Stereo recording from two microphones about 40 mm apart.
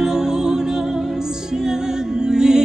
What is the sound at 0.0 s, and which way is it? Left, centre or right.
Music, centre.